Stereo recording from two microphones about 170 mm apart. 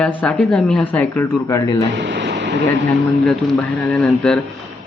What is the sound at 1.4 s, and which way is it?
Speech, 20° left (ahead or behind).